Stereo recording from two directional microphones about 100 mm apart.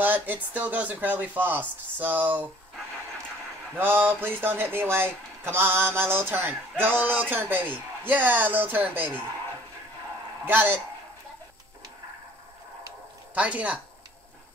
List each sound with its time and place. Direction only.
0.0 s speech: 20° right (ahead or behind)
3.7 s speech: 20° right (ahead or behind)
10.4 s speech: 20° right (ahead or behind)
13.3 s speech: 15° right (ahead or behind)